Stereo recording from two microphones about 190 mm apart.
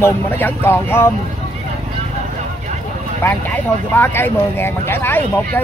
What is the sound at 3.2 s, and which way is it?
Speech, 10° left (ahead or behind).